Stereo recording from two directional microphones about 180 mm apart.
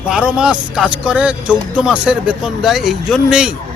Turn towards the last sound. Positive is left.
turn(degrees=-5)  # may be behind; listen again after turning